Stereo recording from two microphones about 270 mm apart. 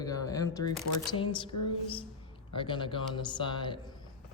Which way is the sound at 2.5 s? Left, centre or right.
Centre.